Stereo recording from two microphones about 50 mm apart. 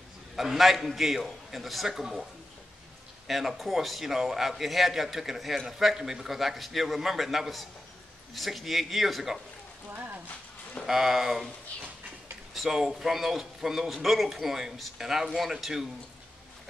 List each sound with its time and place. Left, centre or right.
0.4 s a man's voice: centre
3.3 s a man's voice: centre
9.9 s a sound: right
10.9 s a man's voice: centre
12.5 s a man's voice: centre